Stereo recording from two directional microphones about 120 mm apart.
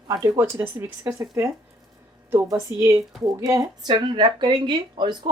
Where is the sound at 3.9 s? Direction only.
40° right (ahead or behind).